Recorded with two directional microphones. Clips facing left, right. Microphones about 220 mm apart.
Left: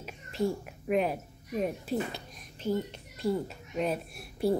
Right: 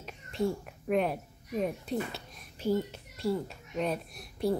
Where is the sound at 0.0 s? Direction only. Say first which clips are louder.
Left 1 dB; 5° left (ahead or behind).